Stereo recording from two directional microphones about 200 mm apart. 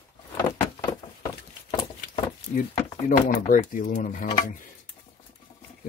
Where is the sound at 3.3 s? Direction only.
45° left (ahead or behind).